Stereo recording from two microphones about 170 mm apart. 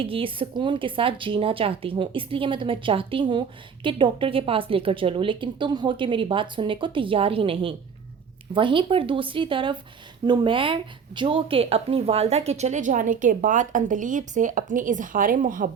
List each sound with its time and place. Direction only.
0.0 s a woman's voice: 30° right (ahead or behind); by 15.7 s 50° right (ahead or behind)